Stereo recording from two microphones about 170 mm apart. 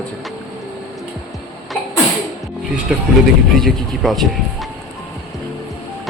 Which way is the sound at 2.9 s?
5° right (ahead or behind).